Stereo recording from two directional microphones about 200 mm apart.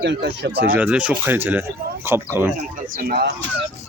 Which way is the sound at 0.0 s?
60° right (ahead or behind).